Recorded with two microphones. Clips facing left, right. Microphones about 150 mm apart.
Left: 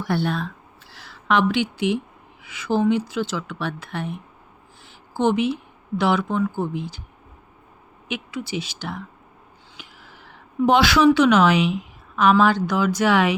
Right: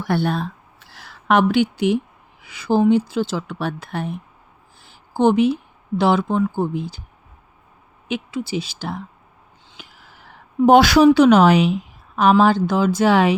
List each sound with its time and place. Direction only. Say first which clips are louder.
0.1 s speech: right 3 dB; 50° right (ahead or behind)
0.3 s a sound: right 3 dB; 45° right (ahead or behind)
2.4 s speech: right 4 dB; 35° right (ahead or behind)
4.8 s a sound: right 4 dB; 35° right (ahead or behind)
6.0 s speech: right 3 dB; 30° right (ahead or behind)
8.0 s a woman's voice: right 4 dB; 30° right (ahead or behind)